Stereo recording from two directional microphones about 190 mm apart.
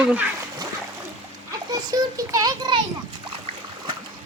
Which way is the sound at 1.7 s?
20° right (ahead or behind).